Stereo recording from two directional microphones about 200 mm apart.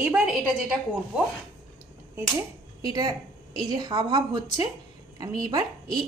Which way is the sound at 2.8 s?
20° right (ahead or behind).